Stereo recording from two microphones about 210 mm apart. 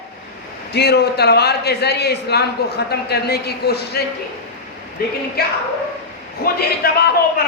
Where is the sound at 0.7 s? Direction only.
50° left (ahead or behind).